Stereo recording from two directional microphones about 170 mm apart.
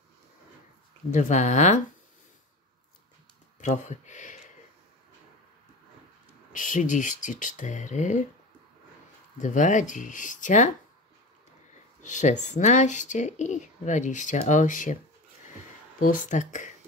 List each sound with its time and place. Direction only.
1.1 s speech: 45° left (ahead or behind)
3.6 s speech: 45° left (ahead or behind)
6.5 s speech: 50° left (ahead or behind)
9.4 s speech: 45° left (ahead or behind)
12.0 s speech: 45° left (ahead or behind)
16.0 s speech: 50° left (ahead or behind)